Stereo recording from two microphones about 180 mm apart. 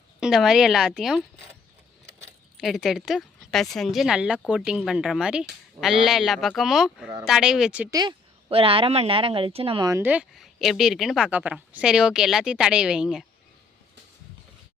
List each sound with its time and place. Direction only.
0.2 s a woman's voice: centre (ahead or behind)
2.6 s a woman's voice: centre (ahead or behind)
7.9 s a woman's voice: 30° right (ahead or behind)
9.9 s a woman's voice: 10° right (ahead or behind)